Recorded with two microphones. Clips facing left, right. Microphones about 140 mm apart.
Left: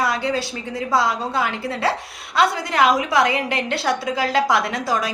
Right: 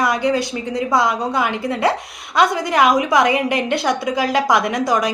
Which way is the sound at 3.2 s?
20° right (ahead or behind).